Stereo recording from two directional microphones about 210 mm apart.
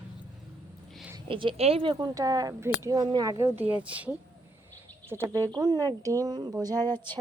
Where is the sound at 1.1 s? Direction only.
20° right (ahead or behind).